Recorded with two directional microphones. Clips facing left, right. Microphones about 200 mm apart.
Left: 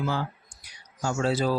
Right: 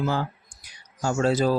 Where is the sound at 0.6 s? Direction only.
45° right (ahead or behind).